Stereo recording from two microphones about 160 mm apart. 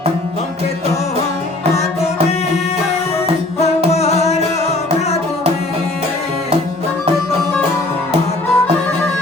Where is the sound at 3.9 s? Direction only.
40° left (ahead or behind).